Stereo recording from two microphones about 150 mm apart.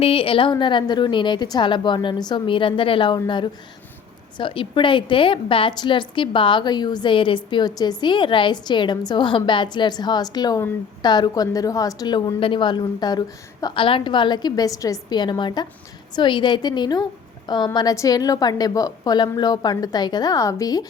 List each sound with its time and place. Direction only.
0.0 s a woman's voice: 40° left (ahead or behind)